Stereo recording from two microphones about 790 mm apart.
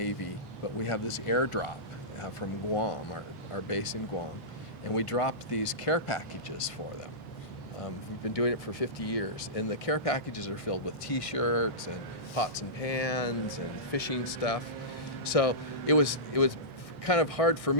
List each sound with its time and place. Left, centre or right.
0.8 s speech: left
4.9 s speech: left
8.3 s speech: left